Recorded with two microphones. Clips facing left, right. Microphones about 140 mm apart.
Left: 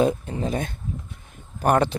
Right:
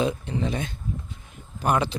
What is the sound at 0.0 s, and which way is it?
A man's voice, 45° left (ahead or behind).